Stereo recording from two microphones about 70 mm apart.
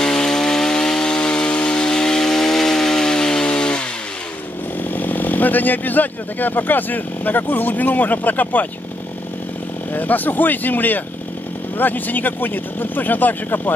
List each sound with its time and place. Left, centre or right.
0.0 s chainsaw: centre
4.9 s speech: left
9.9 s speech: left